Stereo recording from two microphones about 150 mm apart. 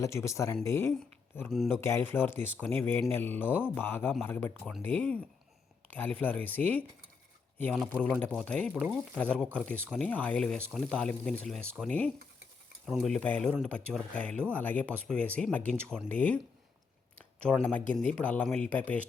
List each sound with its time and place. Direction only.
0.0 s speech: 20° left (ahead or behind)
1.5 s speech: centre (ahead or behind)
1.7 s speech: 15° left (ahead or behind)
6.2 s speech: 10° left (ahead or behind)
8.2 s speech: 5° left (ahead or behind)
12.8 s speech: centre (ahead or behind)
17.4 s speech: 10° left (ahead or behind)